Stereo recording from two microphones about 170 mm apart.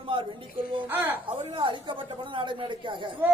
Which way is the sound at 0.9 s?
10° right (ahead or behind).